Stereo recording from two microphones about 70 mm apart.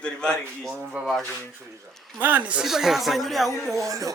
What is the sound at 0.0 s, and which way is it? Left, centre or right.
Speech, centre.